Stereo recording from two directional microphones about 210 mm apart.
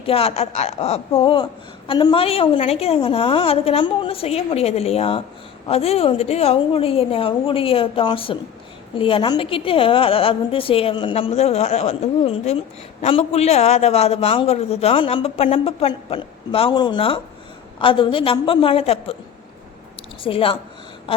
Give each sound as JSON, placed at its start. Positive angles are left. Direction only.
{"t": 0.0, "sound": "a man's voice", "side_deg": 25}
{"t": 20.2, "sound": "a man's voice", "side_deg": 25}